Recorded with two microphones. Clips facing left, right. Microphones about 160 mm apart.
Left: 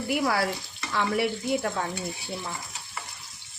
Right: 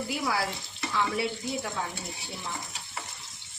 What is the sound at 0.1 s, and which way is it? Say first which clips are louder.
Speech: left 6 dB; 60° left (ahead or behind).